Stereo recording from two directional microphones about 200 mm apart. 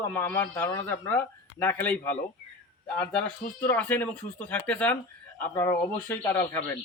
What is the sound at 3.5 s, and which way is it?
A man's voice, 10° left (ahead or behind).